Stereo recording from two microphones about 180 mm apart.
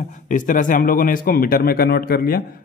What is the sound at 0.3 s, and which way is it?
A man's voice, 45° left (ahead or behind).